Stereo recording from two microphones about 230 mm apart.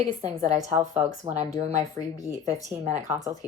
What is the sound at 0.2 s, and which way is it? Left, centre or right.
Speech, right.